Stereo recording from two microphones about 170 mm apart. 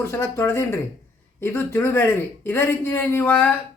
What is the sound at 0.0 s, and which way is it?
A man's voice, 15° left (ahead or behind).